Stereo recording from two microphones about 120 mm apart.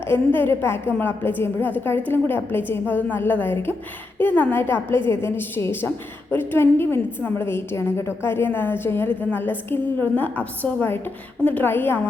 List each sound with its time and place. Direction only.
0.1 s a woman's voice: 15° left (ahead or behind)